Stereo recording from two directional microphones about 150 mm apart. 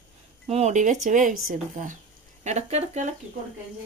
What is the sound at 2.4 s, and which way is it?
Speech, 50° right (ahead or behind).